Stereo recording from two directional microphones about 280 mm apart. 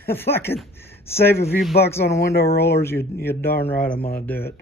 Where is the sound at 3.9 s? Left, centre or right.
Left.